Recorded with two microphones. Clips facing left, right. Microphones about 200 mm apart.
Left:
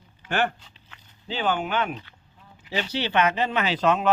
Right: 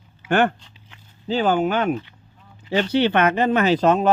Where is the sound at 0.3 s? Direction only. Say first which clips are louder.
Right 7 dB; 55° right (ahead or behind).